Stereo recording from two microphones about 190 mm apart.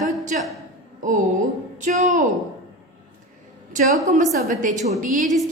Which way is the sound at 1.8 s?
40° right (ahead or behind).